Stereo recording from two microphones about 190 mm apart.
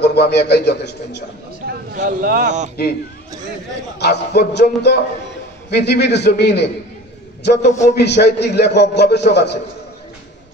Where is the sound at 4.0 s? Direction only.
60° left (ahead or behind).